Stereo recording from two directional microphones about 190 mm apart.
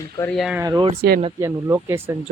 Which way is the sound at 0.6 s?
20° right (ahead or behind).